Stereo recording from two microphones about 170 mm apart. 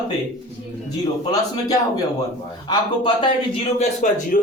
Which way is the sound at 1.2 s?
20° left (ahead or behind).